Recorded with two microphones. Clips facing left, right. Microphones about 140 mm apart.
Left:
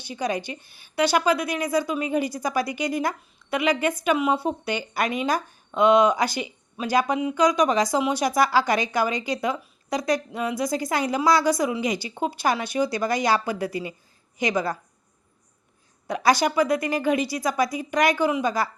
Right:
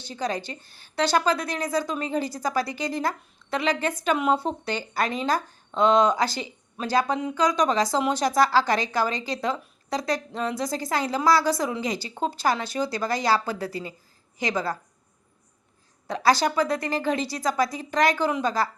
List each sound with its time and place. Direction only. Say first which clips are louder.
0.0 s speech: left 2 dB; 15° left (ahead or behind)
16.0 s speech: left 1 dB; 15° left (ahead or behind)